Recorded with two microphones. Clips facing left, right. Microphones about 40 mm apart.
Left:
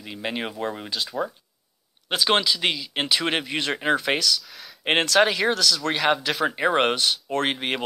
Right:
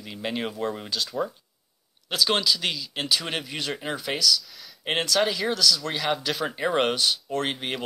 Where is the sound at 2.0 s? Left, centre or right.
Left.